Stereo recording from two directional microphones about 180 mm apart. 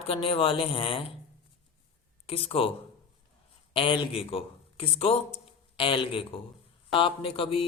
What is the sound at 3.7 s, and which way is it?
A man's voice, 30° left (ahead or behind).